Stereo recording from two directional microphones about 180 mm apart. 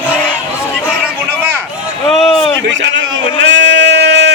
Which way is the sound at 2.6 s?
90° right.